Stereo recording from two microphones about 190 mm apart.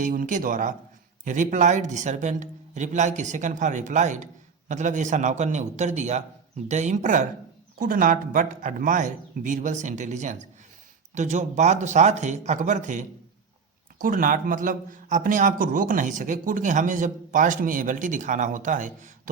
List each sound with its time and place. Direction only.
0.0 s a man's voice: 45° right (ahead or behind)